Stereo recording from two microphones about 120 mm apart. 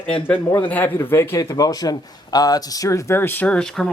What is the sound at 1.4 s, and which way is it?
A man's voice, 30° left (ahead or behind).